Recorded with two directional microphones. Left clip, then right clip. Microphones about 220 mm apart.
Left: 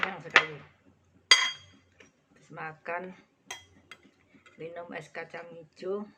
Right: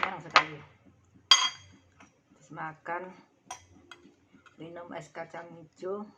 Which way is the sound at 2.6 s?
Centre (ahead or behind).